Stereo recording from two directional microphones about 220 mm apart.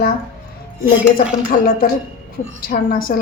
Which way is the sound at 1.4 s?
40° left (ahead or behind).